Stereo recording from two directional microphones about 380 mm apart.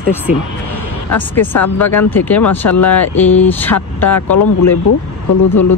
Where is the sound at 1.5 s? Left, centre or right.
Left.